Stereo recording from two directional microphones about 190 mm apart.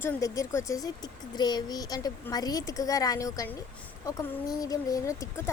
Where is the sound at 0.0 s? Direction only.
15° left (ahead or behind).